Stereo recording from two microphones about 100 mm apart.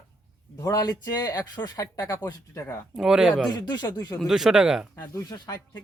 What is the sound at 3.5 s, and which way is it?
Speech, 45° left (ahead or behind).